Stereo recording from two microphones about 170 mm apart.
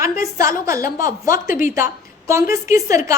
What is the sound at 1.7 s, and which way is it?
A woman's voice, 15° right (ahead or behind).